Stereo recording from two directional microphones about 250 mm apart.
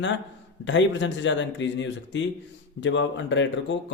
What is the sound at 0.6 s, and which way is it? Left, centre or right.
A man's voice, left.